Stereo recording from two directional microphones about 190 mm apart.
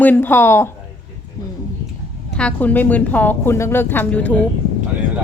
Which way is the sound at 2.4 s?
5° left (ahead or behind).